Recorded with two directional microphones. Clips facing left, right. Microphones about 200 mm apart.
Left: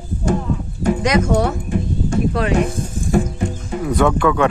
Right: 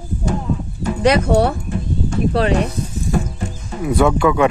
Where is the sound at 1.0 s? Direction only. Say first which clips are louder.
Right 5 dB; 35° right (ahead or behind).